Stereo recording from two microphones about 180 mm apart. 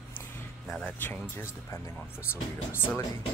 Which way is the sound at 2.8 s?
15° left (ahead or behind).